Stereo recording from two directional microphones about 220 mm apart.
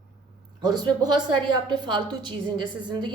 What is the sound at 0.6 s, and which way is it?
A woman's voice, 20° right (ahead or behind).